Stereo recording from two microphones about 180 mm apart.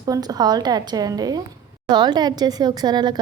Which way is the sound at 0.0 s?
20° right (ahead or behind).